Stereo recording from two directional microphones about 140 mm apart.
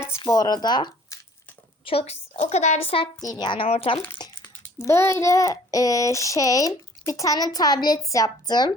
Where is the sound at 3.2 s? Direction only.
30° left (ahead or behind); by 4.0 s 45° left (ahead or behind).